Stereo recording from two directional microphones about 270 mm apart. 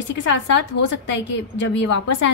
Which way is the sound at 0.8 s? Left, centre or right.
Left.